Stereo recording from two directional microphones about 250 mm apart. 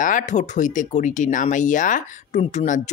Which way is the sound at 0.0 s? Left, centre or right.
Left.